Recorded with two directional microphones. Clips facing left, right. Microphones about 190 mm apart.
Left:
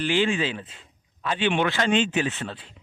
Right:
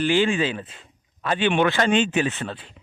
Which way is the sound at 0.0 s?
45° right (ahead or behind).